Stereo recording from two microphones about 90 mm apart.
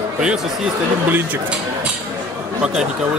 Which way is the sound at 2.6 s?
10° right (ahead or behind).